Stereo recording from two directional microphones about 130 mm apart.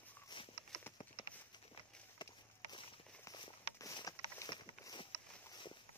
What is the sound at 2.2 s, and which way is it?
Walk, 35° left (ahead or behind).